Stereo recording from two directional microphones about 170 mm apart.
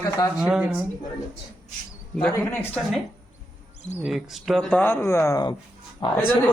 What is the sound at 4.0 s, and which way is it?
Speech, centre (ahead or behind).